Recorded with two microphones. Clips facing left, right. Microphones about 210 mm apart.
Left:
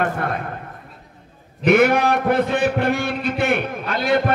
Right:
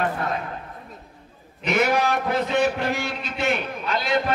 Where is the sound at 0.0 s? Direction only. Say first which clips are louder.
Left 3 dB; 55° left (ahead or behind).